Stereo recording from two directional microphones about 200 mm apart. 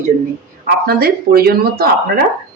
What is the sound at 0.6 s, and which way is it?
Speech, 50° right (ahead or behind).